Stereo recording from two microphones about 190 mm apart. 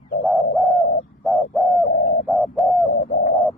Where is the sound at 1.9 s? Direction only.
55° left (ahead or behind).